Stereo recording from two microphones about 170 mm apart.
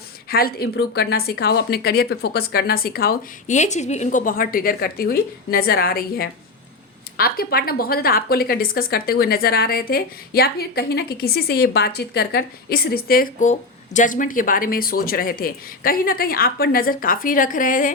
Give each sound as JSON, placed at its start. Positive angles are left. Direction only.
{"t": 0.3, "sound": "a woman's voice", "side_deg": 60}
{"t": 3.4, "sound": "a woman's voice", "side_deg": 45}